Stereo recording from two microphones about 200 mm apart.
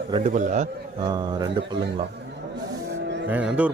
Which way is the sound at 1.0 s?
20° right (ahead or behind).